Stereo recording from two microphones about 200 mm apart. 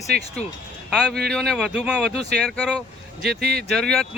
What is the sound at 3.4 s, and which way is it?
Speech, 50° right (ahead or behind).